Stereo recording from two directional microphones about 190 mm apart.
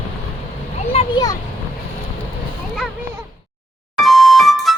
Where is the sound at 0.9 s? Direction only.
20° left (ahead or behind).